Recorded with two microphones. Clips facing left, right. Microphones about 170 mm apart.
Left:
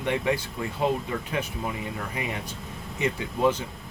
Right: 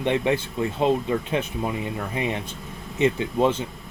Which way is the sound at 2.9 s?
25° right (ahead or behind).